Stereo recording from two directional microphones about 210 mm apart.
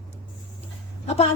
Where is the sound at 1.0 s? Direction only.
30° left (ahead or behind).